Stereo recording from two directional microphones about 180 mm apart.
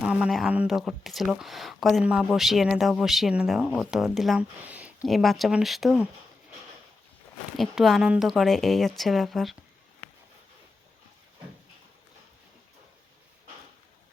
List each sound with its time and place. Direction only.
0.0 s speech: 5° right (ahead or behind)
7.5 s speech: centre (ahead or behind)